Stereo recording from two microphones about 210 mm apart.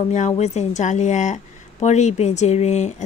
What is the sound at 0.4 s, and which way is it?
A woman's voice, 35° left (ahead or behind).